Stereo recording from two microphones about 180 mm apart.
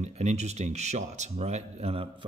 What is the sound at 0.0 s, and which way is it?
Speech, 40° right (ahead or behind).